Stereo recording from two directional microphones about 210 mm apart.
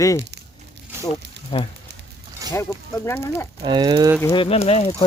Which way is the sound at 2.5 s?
10° left (ahead or behind).